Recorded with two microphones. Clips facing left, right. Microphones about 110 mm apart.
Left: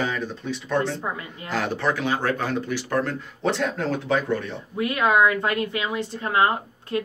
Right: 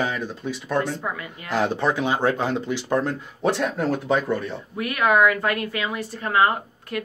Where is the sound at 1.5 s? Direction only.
15° right (ahead or behind).